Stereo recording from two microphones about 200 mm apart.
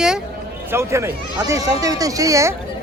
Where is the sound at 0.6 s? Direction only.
15° right (ahead or behind).